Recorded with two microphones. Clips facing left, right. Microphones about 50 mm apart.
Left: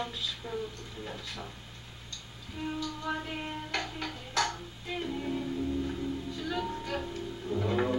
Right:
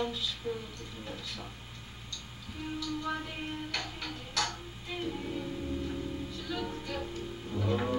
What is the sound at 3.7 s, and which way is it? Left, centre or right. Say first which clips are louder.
Music: left 3 dB; left.